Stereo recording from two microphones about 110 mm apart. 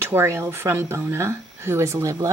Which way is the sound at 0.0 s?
20° right (ahead or behind).